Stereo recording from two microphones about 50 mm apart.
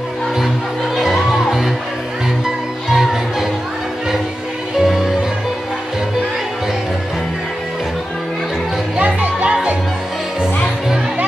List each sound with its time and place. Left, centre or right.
0.9 s music: centre
4.7 s music: centre
8.9 s music: right